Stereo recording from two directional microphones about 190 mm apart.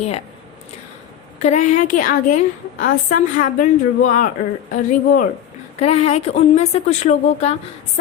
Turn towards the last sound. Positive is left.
turn(degrees=35)  # may be behind; listen again after turning